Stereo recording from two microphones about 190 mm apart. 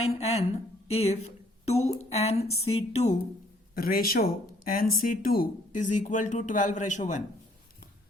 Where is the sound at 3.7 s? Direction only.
50° left (ahead or behind).